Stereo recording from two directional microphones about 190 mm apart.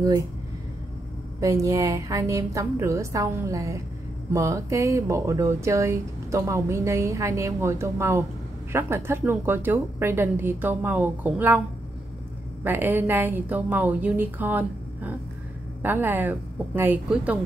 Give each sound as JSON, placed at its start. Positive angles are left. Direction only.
{"t": 1.4, "sound": "speech", "side_deg": -15}
{"t": 12.6, "sound": "speech", "side_deg": -10}